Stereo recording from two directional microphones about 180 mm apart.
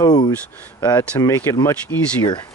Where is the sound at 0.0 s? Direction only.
20° left (ahead or behind).